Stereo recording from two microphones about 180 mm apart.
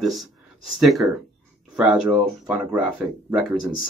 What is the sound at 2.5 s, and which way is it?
Speech, 5° right (ahead or behind).